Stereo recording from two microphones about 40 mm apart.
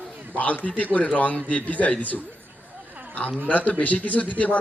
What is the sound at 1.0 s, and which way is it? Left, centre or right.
Speech, left.